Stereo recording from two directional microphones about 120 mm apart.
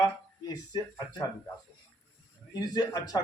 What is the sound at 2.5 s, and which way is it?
Speech, 35° left (ahead or behind).